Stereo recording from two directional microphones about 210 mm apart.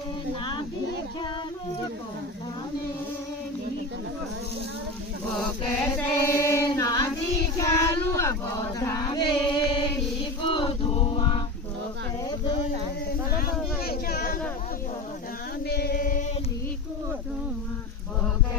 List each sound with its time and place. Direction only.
6.0 s female singing: 10° left (ahead or behind)
7.6 s child singing: 15° left (ahead or behind)
9.1 s music: 20° left (ahead or behind)
10.4 s choir: 25° left (ahead or behind)
13.3 s a sound: 45° left (ahead or behind)
15.6 s chant: 50° left (ahead or behind)